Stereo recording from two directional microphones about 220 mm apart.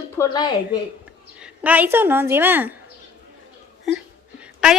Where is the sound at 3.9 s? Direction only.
5° right (ahead or behind).